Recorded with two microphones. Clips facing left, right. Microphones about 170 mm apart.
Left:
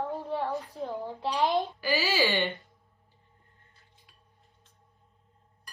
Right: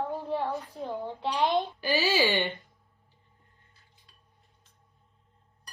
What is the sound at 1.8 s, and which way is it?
Speech, 20° right (ahead or behind).